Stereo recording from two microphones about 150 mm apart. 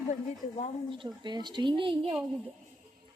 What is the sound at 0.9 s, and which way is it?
Speech, 30° right (ahead or behind).